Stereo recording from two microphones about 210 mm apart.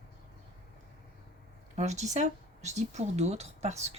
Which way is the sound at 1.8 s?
35° right (ahead or behind).